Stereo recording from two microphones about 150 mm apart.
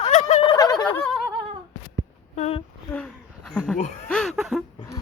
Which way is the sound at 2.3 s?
45° left (ahead or behind).